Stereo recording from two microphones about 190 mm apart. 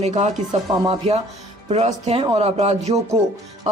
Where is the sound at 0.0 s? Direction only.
35° right (ahead or behind).